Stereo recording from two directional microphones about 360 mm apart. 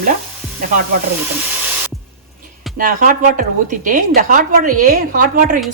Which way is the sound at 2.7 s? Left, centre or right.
Right.